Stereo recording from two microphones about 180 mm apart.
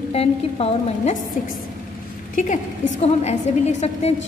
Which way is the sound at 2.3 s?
45° left (ahead or behind).